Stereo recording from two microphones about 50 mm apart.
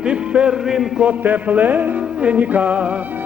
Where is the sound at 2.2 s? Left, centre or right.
Right.